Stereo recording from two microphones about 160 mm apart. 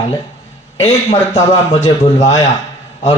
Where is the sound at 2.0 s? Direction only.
25° left (ahead or behind).